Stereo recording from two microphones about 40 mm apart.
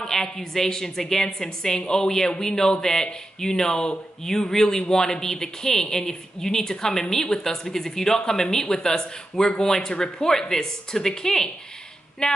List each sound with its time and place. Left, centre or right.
0.0 s speech: centre
12.2 s speech: left